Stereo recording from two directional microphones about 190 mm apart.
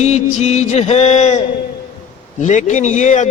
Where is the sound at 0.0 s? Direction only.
35° left (ahead or behind).